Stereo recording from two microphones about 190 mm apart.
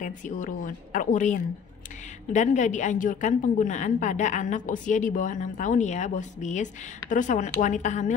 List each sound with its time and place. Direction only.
0.0 s a woman's voice: 45° left (ahead or behind)